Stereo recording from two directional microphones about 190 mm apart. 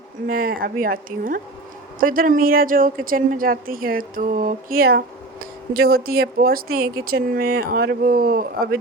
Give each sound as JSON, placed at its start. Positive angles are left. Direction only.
{"t": 0.3, "sound": "a woman's voice", "side_deg": -50}